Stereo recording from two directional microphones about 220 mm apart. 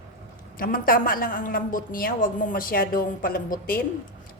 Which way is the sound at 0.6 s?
40° left (ahead or behind).